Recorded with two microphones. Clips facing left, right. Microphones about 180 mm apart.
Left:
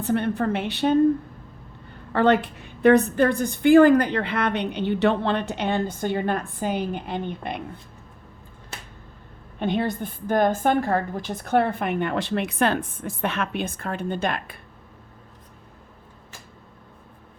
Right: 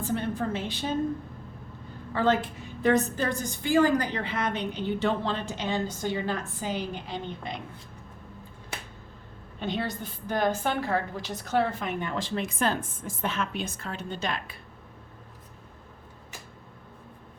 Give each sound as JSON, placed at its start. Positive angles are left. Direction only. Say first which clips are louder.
{"t": 0.0, "sound": "a woman's voice", "louder": "left 6 dB", "side_deg": 65}
{"t": 2.1, "sound": "a woman's voice", "louder": "left 6 dB", "side_deg": 65}
{"t": 9.6, "sound": "a woman's voice", "louder": "left 7 dB", "side_deg": 55}